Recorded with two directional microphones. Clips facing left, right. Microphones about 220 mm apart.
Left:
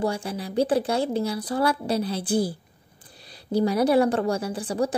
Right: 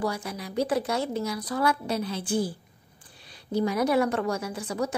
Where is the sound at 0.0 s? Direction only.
30° left (ahead or behind).